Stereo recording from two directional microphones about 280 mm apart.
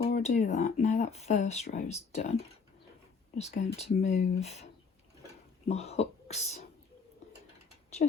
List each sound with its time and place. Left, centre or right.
0.1 s speech: left
3.3 s speech: left